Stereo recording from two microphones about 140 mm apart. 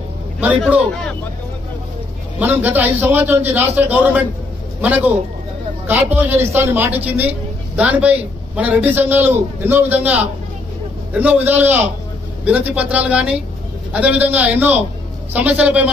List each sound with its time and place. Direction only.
0.8 s speech: 5° left (ahead or behind)
2.3 s speech: 10° right (ahead or behind)
5.9 s speech: 10° right (ahead or behind)
11.1 s speech: 10° right (ahead or behind)